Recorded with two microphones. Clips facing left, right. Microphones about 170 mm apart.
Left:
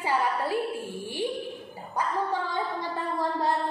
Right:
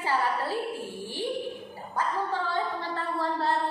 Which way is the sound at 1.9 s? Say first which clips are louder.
Left 1 dB; 15° left (ahead or behind).